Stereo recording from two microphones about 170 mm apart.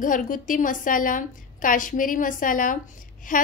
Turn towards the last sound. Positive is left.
turn(degrees=50)  # may be behind; listen again after turning